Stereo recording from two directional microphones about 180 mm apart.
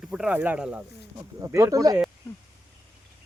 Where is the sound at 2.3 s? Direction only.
15° left (ahead or behind).